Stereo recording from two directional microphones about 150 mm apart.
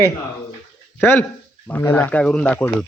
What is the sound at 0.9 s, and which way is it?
A man's voice, 15° left (ahead or behind).